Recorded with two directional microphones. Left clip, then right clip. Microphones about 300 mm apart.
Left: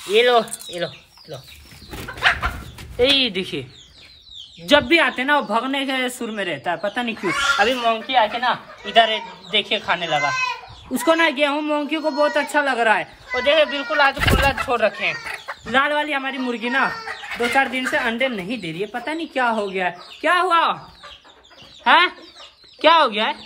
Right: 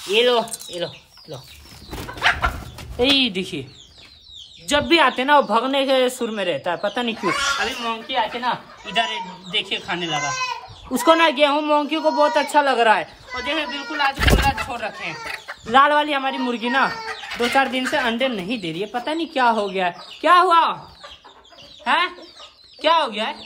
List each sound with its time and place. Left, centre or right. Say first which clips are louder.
0.1 s speech: left 2 dB; centre
3.0 s speech: left 1 dB; centre
4.8 s speech: right 1 dB; centre
11.0 s speech: right 2 dB; centre
21.8 s speech: left 5 dB; centre